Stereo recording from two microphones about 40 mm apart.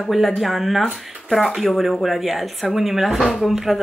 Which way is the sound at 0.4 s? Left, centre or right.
Centre.